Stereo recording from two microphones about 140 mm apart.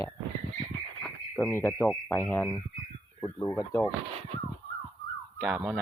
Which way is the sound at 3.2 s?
25° left (ahead or behind).